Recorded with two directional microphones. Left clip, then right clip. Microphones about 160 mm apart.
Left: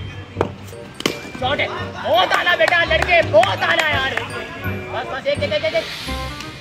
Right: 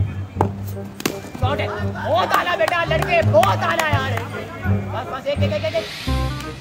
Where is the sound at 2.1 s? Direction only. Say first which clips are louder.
Left 3 dB; 45° left (ahead or behind).